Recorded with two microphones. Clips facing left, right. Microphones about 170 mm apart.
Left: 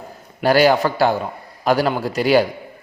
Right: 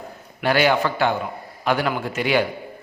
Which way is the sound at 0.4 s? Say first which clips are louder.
Left 4 dB; 40° left (ahead or behind).